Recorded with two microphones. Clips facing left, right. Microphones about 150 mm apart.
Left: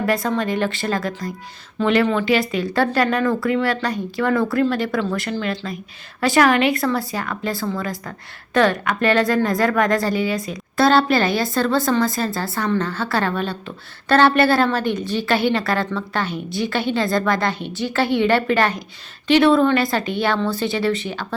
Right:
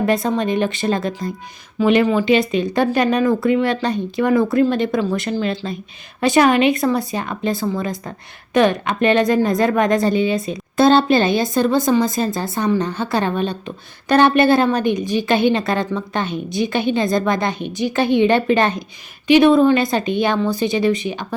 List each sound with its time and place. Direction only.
0.0 s a woman's voice: 20° right (ahead or behind)